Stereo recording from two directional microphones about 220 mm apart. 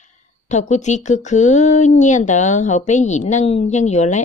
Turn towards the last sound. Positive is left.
turn(degrees=30)  # may be behind; listen again after turning